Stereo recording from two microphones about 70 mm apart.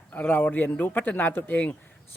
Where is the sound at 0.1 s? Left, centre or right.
Left.